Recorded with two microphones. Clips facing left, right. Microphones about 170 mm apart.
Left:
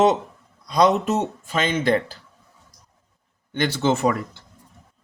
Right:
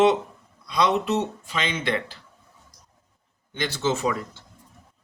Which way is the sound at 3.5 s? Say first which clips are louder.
Left 4 dB; 60° left (ahead or behind).